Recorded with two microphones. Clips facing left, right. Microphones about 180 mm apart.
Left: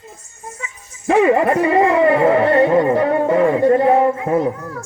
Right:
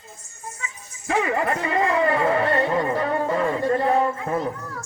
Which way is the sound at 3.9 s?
60° left (ahead or behind).